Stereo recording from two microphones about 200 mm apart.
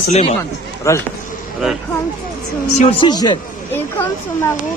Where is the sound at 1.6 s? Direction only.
5° right (ahead or behind).